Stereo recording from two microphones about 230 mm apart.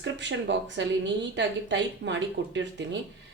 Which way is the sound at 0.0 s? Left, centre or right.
Right.